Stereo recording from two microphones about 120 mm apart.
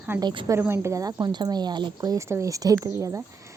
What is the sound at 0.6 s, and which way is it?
Speech, 20° right (ahead or behind).